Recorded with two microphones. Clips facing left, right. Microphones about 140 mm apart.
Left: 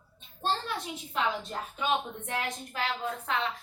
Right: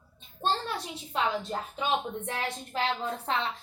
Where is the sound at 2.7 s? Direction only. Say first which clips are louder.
Right 3 dB; 30° right (ahead or behind).